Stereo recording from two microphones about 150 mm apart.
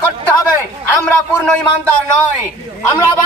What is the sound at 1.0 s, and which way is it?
Speech, 10° left (ahead or behind).